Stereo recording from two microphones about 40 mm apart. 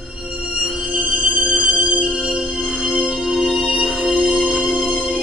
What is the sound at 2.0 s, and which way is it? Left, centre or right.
Music, right.